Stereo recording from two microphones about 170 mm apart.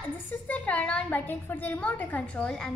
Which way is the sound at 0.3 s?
10° left (ahead or behind).